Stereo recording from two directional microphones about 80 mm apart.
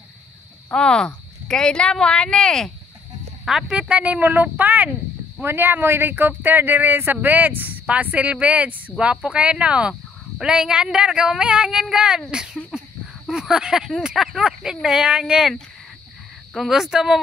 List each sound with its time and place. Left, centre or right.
0.7 s speech: centre
3.4 s speech: centre
16.5 s speech: centre